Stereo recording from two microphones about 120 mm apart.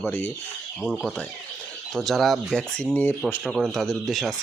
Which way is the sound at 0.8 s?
Centre (ahead or behind).